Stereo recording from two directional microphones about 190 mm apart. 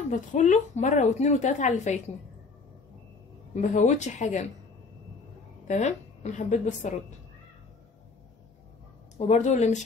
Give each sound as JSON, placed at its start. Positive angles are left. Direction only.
{"t": 0.1, "sound": "a woman's voice", "side_deg": 40}
{"t": 3.6, "sound": "a woman's voice", "side_deg": 40}
{"t": 5.7, "sound": "a woman's voice", "side_deg": 35}
{"t": 9.3, "sound": "a woman's voice", "side_deg": 35}